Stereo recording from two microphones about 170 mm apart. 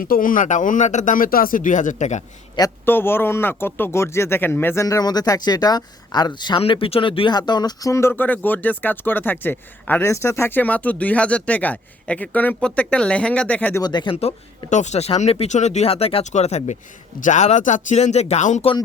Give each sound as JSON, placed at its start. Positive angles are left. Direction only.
{"t": 0.0, "sound": "speech", "side_deg": 55}
{"t": 2.6, "sound": "a man's voice", "side_deg": 15}
{"t": 13.8, "sound": "speech", "side_deg": 25}